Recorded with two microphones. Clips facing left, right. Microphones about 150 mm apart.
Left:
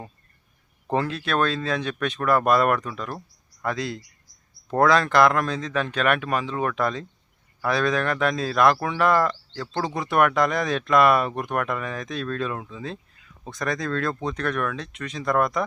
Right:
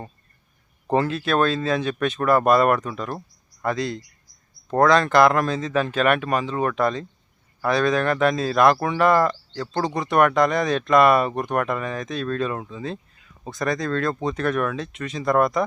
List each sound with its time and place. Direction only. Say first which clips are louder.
0.9 s speech: right 4 dB; centre (ahead or behind)